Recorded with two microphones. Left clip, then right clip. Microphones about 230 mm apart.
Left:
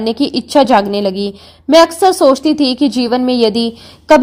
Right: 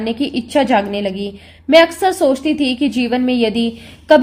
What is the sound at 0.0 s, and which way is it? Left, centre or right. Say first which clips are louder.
A woman's voice: left 5 dB; left.